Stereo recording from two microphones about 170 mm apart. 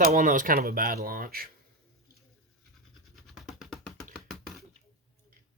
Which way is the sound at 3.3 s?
Centre (ahead or behind).